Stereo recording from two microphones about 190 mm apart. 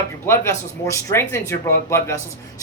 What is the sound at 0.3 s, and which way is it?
Speech, 15° left (ahead or behind).